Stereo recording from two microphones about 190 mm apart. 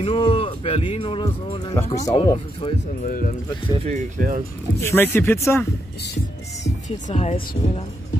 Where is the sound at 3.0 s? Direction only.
45° left (ahead or behind).